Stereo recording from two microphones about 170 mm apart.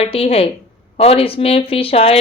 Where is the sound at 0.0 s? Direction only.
35° left (ahead or behind).